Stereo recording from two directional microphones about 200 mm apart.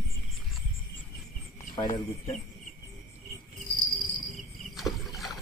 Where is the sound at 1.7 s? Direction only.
20° left (ahead or behind).